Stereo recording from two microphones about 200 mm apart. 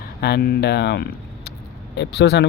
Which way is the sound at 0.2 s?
50° left (ahead or behind).